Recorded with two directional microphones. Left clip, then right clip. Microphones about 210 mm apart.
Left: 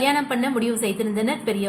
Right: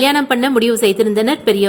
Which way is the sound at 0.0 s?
40° right (ahead or behind).